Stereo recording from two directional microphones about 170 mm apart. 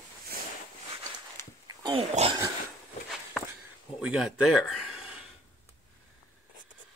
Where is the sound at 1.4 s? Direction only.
15° left (ahead or behind).